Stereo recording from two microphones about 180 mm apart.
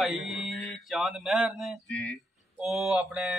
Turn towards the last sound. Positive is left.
turn(degrees=-5)  # may be behind; listen again after turning